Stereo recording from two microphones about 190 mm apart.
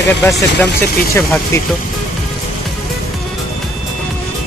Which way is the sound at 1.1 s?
15° left (ahead or behind).